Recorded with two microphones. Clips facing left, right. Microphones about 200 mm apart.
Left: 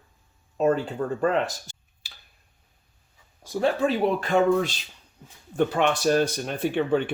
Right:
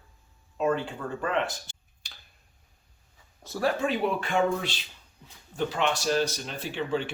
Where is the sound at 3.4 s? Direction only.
15° left (ahead or behind).